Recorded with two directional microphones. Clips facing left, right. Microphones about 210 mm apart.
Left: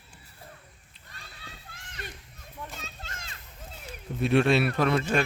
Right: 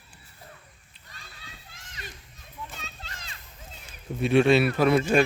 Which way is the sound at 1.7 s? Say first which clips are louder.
Left 3 dB; 55° left (ahead or behind).